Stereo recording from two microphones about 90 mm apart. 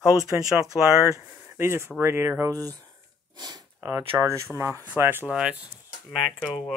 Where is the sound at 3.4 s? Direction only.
50° right (ahead or behind).